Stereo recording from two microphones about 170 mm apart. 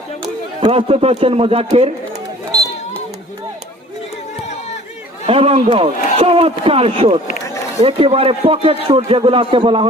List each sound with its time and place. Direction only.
0.6 s a man's voice: 35° right (ahead or behind)
5.2 s a man's voice: 35° right (ahead or behind)